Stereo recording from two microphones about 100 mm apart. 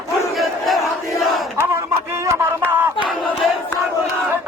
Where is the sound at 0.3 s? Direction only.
Centre (ahead or behind).